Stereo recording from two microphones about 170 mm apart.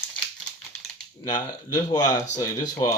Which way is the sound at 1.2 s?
25° left (ahead or behind).